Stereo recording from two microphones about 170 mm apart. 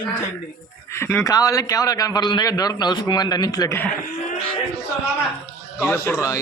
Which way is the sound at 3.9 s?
50° left (ahead or behind).